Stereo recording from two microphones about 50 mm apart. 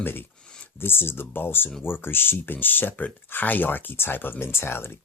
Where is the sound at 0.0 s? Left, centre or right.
Left.